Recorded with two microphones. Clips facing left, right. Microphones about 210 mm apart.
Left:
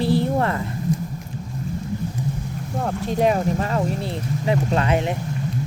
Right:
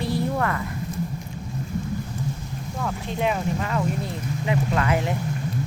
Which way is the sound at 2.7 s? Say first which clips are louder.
Left 6 dB; 40° left (ahead or behind).